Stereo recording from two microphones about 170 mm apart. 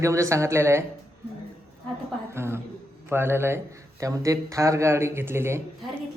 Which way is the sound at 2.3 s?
15° right (ahead or behind).